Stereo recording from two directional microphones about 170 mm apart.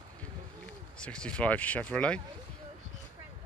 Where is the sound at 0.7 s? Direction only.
5° left (ahead or behind).